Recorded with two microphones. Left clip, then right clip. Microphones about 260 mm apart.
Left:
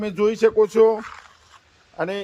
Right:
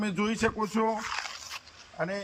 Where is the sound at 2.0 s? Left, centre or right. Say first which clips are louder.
Left 7 dB; left.